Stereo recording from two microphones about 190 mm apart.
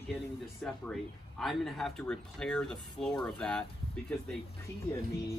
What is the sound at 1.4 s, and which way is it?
Speech, centre (ahead or behind).